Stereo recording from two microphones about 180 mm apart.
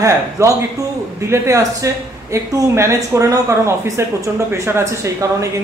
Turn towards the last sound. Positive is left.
turn(degrees=-15)  # may be behind; listen again after turning